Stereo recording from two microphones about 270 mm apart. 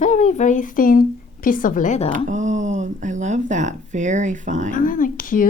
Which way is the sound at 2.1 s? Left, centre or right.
Right.